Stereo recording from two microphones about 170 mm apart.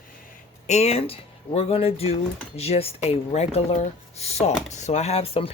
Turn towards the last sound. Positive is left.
turn(degrees=35)  # may be behind; listen again after turning